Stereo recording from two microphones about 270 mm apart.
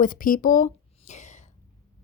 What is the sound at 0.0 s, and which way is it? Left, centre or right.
Speech, left.